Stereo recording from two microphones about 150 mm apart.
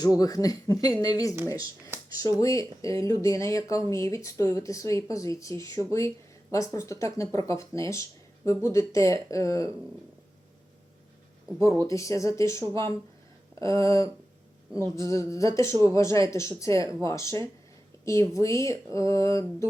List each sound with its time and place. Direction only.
0.0 s speech: 25° left (ahead or behind)
2.4 s speech: 20° left (ahead or behind)
11.9 s speech: 20° left (ahead or behind)
13.6 s speech: 20° left (ahead or behind)